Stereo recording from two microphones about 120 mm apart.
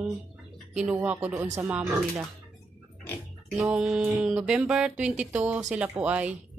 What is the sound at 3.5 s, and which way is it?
Speech, 5° right (ahead or behind).